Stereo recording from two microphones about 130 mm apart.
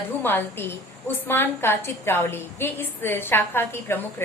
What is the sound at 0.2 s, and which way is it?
A woman's voice, 15° left (ahead or behind).